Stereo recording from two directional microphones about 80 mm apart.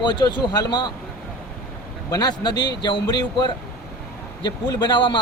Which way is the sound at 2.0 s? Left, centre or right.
Left.